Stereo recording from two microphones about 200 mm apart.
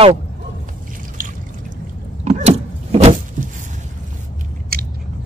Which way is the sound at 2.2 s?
35° right (ahead or behind).